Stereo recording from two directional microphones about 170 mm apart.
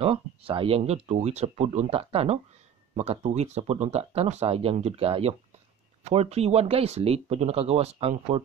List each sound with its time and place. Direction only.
0.0 s speech: 35° right (ahead or behind)